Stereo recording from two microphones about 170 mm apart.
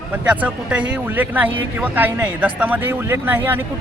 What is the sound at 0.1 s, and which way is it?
Speech, 10° right (ahead or behind).